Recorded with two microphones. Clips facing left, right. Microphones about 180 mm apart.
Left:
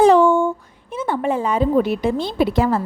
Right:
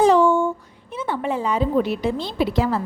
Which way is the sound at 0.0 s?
55° left (ahead or behind).